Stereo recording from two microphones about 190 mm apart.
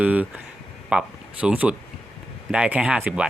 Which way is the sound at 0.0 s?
10° right (ahead or behind).